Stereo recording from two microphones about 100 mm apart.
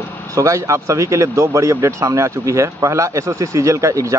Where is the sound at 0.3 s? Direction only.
30° right (ahead or behind).